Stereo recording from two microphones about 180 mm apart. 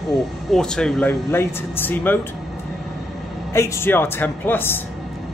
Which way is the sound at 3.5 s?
15° left (ahead or behind).